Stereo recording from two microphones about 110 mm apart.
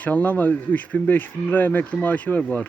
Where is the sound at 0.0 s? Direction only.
15° left (ahead or behind).